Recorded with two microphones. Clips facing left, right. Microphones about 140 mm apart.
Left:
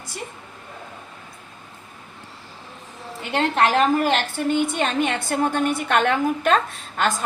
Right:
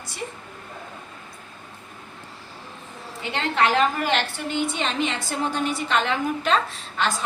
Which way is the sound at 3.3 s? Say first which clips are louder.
Left 3 dB; 45° left (ahead or behind).